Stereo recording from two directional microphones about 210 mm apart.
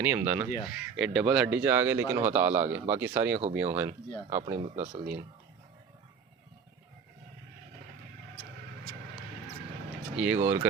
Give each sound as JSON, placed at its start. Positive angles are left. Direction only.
{"t": 0.0, "sound": "speech", "side_deg": -10}
{"t": 4.7, "sound": "speech", "side_deg": -30}
{"t": 10.2, "sound": "speech", "side_deg": -10}